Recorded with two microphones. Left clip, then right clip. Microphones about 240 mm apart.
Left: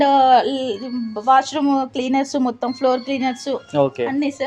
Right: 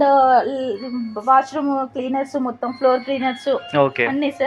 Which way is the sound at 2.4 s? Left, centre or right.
Left.